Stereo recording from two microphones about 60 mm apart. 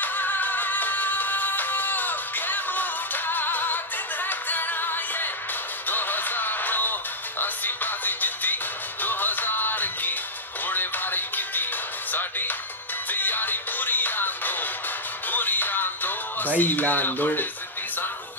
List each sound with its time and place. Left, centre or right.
0.0 s music: left